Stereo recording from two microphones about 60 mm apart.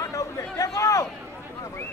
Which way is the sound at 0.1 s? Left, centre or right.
Left.